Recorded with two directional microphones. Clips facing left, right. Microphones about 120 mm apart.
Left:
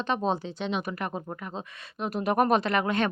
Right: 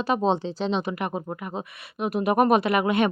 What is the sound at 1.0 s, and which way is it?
Speech, 15° right (ahead or behind).